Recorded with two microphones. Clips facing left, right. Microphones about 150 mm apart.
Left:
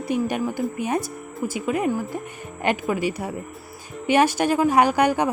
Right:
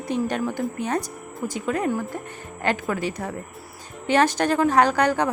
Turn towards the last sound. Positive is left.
turn(degrees=10)  # may be behind; listen again after turning